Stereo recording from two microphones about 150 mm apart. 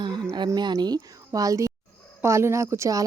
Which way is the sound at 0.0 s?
30° right (ahead or behind).